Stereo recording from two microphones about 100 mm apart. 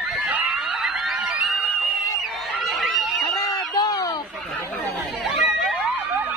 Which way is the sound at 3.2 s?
35° left (ahead or behind).